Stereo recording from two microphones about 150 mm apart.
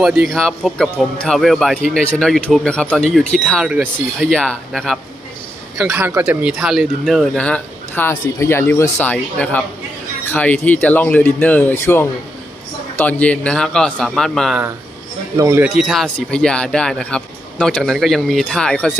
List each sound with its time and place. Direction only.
0.0 s a man's voice: 5° right (ahead or behind)
5.9 s a man's voice: 15° right (ahead or behind); by 14.6 s centre (ahead or behind)
15.4 s speech: 20° right (ahead or behind)
15.7 s a man's voice: centre (ahead or behind)